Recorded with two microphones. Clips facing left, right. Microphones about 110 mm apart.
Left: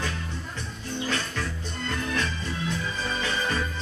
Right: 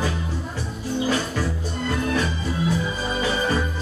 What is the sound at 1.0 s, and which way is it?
Music, 10° right (ahead or behind).